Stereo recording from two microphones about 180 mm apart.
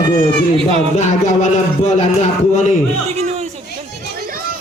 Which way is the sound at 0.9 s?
40° left (ahead or behind).